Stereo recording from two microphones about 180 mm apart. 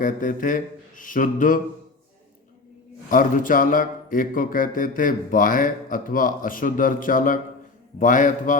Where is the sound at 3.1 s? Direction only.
50° left (ahead or behind).